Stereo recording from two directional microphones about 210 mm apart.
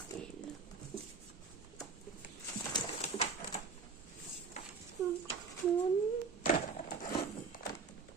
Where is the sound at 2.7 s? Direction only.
30° left (ahead or behind).